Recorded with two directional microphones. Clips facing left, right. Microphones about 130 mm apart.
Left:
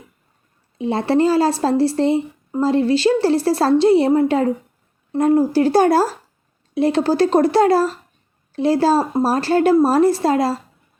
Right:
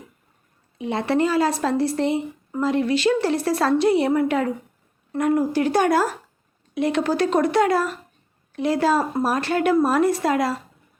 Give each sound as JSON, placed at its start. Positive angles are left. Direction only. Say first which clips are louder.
{"t": 0.8, "sound": "speech", "louder": "left 4 dB", "side_deg": 30}